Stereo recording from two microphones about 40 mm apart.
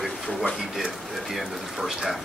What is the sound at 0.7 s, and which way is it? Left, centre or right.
Speech, centre.